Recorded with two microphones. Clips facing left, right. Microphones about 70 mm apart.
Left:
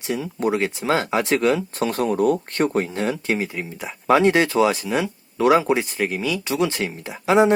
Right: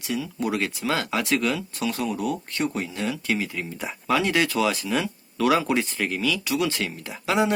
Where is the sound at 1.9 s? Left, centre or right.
Left.